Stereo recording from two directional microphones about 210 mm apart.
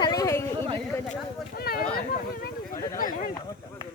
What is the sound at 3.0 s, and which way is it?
Speech, 40° left (ahead or behind).